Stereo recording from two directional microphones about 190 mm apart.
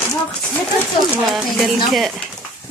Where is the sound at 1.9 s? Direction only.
Centre (ahead or behind).